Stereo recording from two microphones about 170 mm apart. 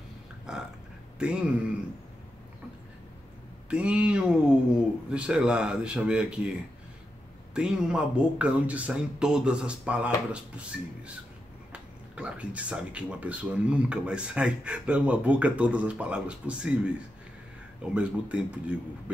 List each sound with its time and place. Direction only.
0.5 s a sound: 5° right (ahead or behind)
1.2 s speech: 5° right (ahead or behind)
3.7 s speech: 5° right (ahead or behind)
7.5 s speech: 5° right (ahead or behind)
11.7 s speech: 5° right (ahead or behind)